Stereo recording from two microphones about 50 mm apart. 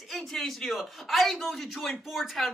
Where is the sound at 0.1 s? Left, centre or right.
Centre.